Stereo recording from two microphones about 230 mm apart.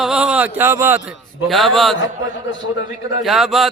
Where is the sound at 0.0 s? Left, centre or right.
Centre.